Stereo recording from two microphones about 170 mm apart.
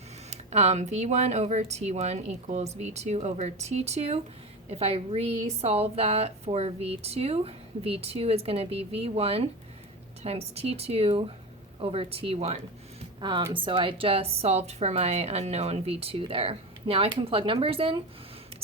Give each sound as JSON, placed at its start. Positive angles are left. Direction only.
{"t": 0.3, "sound": "a woman's voice", "side_deg": -40}